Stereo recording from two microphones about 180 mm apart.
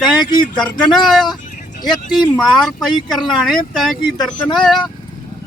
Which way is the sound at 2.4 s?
Centre (ahead or behind).